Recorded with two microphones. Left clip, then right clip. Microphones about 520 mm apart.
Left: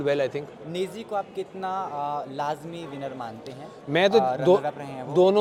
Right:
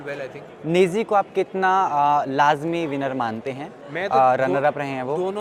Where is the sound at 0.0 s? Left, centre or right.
Left.